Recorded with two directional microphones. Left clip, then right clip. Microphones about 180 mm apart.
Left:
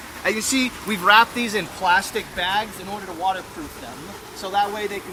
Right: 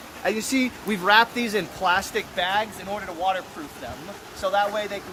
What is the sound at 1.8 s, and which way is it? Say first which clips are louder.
Speech: left 4 dB; 20° right (ahead or behind).